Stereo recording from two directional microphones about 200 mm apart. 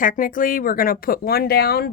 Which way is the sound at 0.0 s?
40° left (ahead or behind).